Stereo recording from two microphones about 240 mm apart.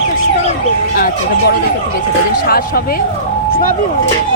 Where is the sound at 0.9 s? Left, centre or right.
Left.